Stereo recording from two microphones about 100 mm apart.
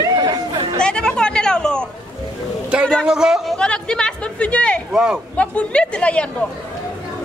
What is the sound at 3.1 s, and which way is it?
Speech, 5° right (ahead or behind).